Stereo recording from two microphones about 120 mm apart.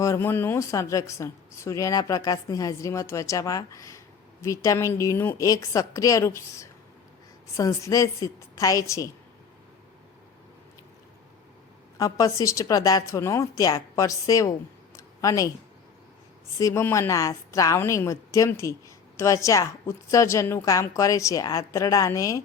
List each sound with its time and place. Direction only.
0.0 s a woman's voice: 20° left (ahead or behind)
11.9 s a woman's voice: 30° left (ahead or behind)
14.9 s a sound: 25° left (ahead or behind)
16.6 s a woman's voice: 25° left (ahead or behind)